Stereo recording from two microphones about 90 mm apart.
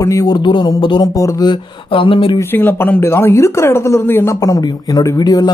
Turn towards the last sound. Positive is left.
turn(degrees=45)  # may be behind; listen again after turning